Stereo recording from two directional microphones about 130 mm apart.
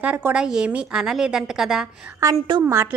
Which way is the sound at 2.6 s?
20° right (ahead or behind).